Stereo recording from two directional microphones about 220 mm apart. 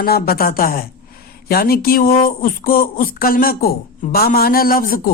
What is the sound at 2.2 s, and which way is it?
Speech, 40° left (ahead or behind).